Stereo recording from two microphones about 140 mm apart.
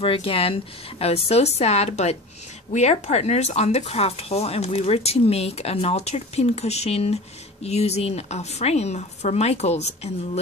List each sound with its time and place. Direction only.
0.0 s speech: 40° left (ahead or behind)